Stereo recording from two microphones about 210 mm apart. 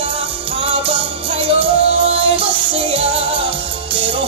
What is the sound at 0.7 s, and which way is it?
Music, 25° right (ahead or behind).